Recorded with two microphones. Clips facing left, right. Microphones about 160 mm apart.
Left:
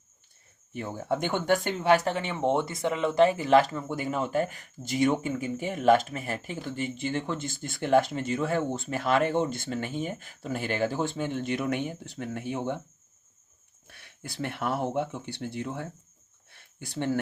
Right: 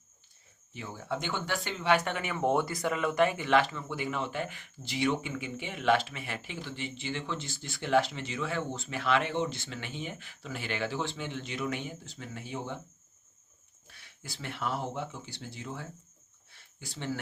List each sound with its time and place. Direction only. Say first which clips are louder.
0.7 s speech: left 6 dB; 55° left (ahead or behind)
13.8 s speech: left 5 dB; 55° left (ahead or behind)
16.5 s a sound: left 4 dB; 55° left (ahead or behind)